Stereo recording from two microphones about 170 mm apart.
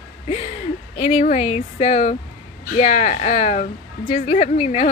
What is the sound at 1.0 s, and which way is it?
Speech, 45° left (ahead or behind).